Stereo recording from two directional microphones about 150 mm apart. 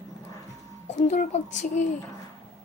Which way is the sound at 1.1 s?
55° left (ahead or behind).